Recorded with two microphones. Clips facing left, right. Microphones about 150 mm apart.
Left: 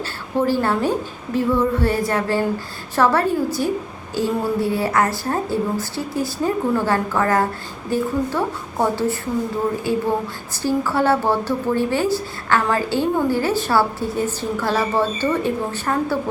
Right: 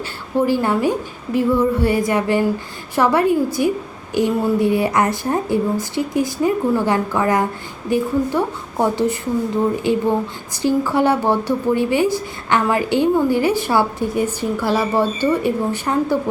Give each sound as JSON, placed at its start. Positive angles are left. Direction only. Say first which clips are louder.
{"t": 0.0, "sound": "a woman's voice", "louder": "right 2 dB", "side_deg": -15}